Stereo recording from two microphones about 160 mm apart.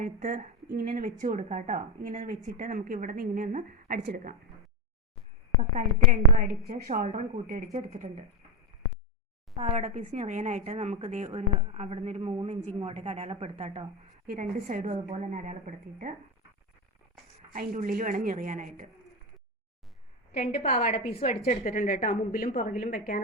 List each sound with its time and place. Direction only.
0.0 s a woman's voice: 55° right (ahead or behind); by 4.2 s 80° right
5.5 s a woman's voice: 55° right (ahead or behind)
9.6 s a woman's voice: 50° right (ahead or behind)
11.3 s a woman's voice: 40° right (ahead or behind)
14.3 s a woman's voice: 50° right (ahead or behind)
17.5 s a woman's voice: 60° right (ahead or behind)
20.3 s a woman's voice: 65° left (ahead or behind)
20.6 s a woman's voice: 45° left (ahead or behind)
21.2 s a woman's voice: 65° left (ahead or behind)